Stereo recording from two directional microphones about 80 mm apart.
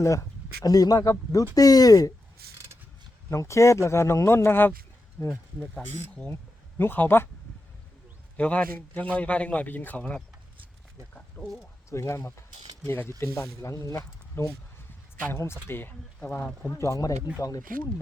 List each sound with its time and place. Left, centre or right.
0.0 s speech: left
0.6 s speech: left
3.2 s speech: left
8.4 s a man's voice: centre
11.1 s wild animals: centre
11.9 s speech: left
15.2 s speech: left
16.6 s speech: left